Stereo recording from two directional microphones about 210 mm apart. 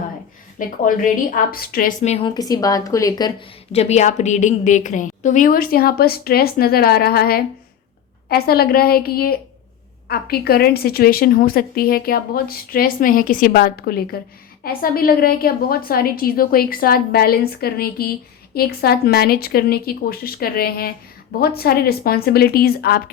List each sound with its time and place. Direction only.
0.9 s a woman's voice: 40° left (ahead or behind)